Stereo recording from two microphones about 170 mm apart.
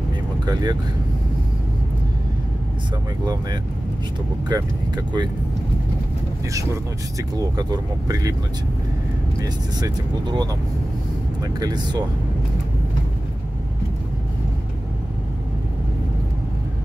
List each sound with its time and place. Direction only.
0.5 s speech: 25° right (ahead or behind)
4.5 s speech: 25° right (ahead or behind)
7.3 s speech: 20° right (ahead or behind)
9.4 s speech: 20° right (ahead or behind)